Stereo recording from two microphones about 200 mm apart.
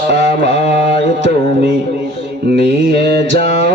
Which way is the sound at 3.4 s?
60° right (ahead or behind).